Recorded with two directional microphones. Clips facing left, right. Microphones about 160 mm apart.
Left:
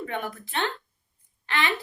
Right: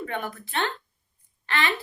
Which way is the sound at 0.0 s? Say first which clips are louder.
Even; 15° left (ahead or behind).